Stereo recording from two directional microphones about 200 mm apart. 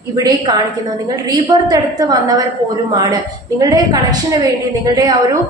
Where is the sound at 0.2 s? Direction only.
20° right (ahead or behind).